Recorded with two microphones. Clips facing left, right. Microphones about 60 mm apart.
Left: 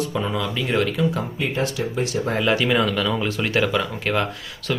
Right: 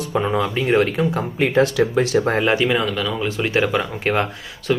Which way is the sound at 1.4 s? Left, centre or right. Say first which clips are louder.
Right 9 dB; right.